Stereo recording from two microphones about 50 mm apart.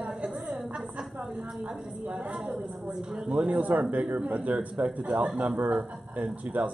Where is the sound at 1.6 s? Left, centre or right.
Right.